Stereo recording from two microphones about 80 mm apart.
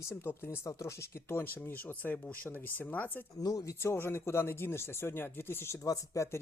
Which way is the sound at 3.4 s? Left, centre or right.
Left.